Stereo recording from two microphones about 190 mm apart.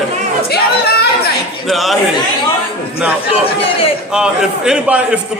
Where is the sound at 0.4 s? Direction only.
55° left (ahead or behind).